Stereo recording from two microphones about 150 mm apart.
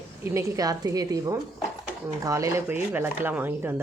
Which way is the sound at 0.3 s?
25° right (ahead or behind).